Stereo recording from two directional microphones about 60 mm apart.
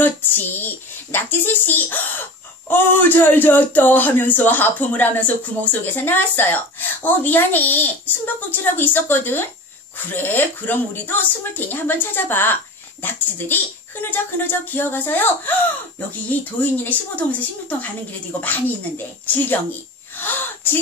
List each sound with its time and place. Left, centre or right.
0.0 s speech: left
14.1 s speech: left
20.2 s a sound: left